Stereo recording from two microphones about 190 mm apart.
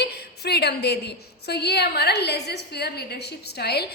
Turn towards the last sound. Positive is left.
turn(degrees=60)  # may be behind; listen again after turning